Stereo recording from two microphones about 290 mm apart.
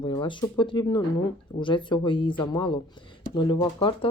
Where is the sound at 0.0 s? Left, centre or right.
Centre.